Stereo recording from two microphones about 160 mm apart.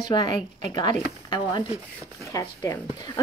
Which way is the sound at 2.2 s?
20° left (ahead or behind).